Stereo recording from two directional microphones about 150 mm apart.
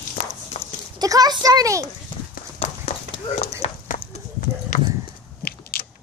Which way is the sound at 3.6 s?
60° left (ahead or behind).